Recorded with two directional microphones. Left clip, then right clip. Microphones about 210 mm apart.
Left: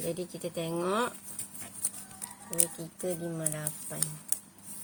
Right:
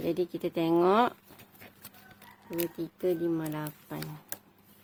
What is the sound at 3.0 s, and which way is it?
Speech, 45° right (ahead or behind).